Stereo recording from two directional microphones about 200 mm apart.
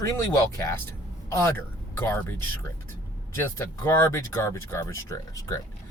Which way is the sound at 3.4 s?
10° left (ahead or behind).